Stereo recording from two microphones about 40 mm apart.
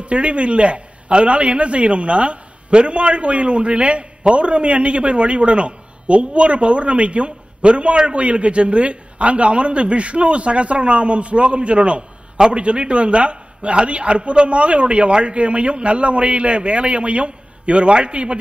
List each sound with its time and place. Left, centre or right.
0.0 s a man's voice: right